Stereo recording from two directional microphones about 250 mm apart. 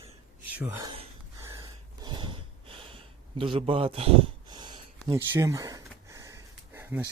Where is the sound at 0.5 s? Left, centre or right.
Centre.